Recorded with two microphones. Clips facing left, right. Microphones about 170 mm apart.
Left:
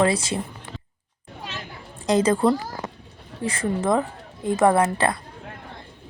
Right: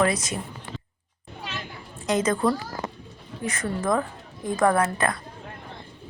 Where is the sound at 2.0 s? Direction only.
30° left (ahead or behind).